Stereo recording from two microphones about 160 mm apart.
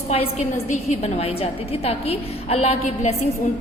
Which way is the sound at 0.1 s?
40° left (ahead or behind).